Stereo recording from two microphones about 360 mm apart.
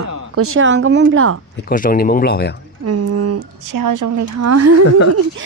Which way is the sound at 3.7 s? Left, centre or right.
Right.